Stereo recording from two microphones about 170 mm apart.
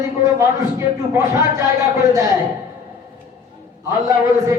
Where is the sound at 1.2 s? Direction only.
15° right (ahead or behind).